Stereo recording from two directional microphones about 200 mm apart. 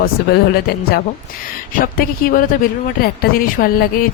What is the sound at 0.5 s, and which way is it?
Speech, 50° left (ahead or behind).